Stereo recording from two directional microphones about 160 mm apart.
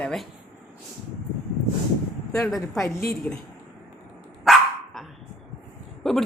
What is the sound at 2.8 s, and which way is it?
Speech, 15° left (ahead or behind).